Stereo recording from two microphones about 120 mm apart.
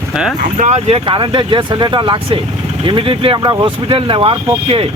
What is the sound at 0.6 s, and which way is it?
Speech, 75° right (ahead or behind).